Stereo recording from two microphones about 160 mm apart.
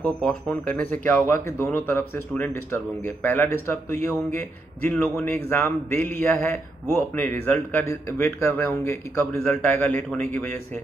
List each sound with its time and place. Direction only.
0.0 s a man's voice: 5° left (ahead or behind)
4.9 s a man's voice: 5° left (ahead or behind)
5.2 s a man's voice: 15° left (ahead or behind)